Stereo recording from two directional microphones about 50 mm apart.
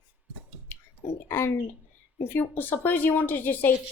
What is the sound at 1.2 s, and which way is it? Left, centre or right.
Speech, left.